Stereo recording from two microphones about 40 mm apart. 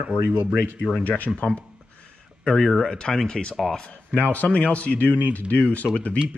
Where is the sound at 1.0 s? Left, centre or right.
Left.